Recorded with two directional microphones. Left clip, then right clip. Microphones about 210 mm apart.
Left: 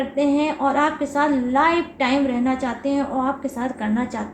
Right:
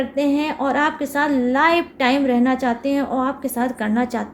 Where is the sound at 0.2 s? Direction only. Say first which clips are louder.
Left 1 dB; 55° right (ahead or behind).